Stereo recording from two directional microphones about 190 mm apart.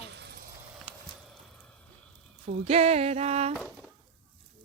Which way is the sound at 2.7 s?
30° right (ahead or behind).